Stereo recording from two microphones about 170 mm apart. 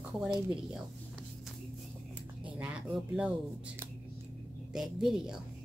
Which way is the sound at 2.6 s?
5° right (ahead or behind).